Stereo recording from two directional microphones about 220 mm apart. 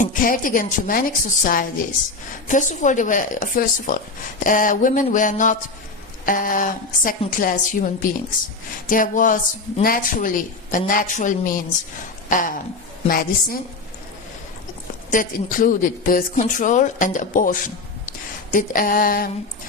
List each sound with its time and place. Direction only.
0.0 s speech: 40° left (ahead or behind)
15.1 s speech: 40° left (ahead or behind)